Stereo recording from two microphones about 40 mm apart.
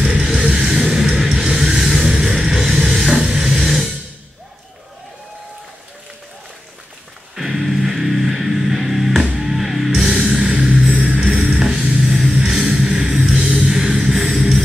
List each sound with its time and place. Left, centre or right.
0.0 s music: centre
7.3 s music: centre